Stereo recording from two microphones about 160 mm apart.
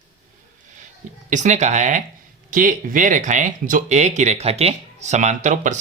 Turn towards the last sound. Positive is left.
turn(degrees=-50)  # may be behind; listen again after turning